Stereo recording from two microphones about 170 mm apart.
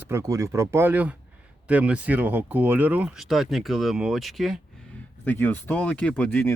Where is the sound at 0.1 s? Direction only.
15° right (ahead or behind); by 4.6 s centre (ahead or behind).